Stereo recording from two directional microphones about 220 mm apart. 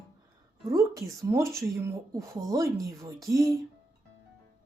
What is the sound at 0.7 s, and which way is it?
Speech, 15° right (ahead or behind).